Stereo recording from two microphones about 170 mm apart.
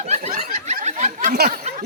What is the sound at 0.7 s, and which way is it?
Snicker, 45° right (ahead or behind).